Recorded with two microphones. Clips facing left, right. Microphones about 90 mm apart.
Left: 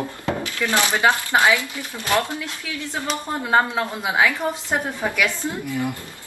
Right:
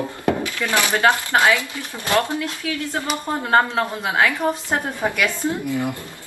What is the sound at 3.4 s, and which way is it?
A woman's voice, 10° left (ahead or behind).